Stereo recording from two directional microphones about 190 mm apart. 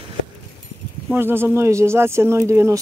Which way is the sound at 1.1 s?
10° right (ahead or behind).